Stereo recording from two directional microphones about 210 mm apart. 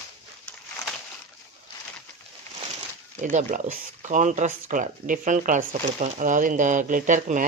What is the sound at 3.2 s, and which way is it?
Speech, 35° right (ahead or behind).